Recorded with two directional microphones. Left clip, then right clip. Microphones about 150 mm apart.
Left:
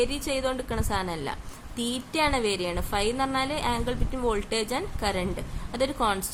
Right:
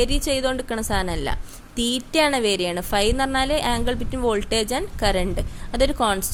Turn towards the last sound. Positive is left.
turn(degrees=-40)  # may be behind; listen again after turning